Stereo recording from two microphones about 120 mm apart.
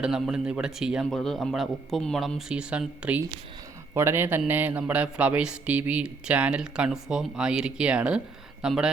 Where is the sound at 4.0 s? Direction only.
20° right (ahead or behind).